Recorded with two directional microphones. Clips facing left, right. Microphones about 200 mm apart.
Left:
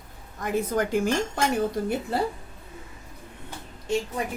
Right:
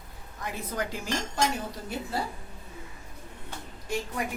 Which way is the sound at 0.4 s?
50° left (ahead or behind).